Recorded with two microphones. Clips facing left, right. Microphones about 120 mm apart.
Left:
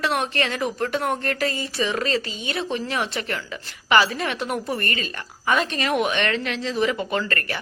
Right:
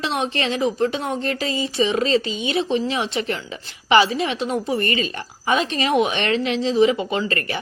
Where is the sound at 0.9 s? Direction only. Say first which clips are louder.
Even; 55° left (ahead or behind).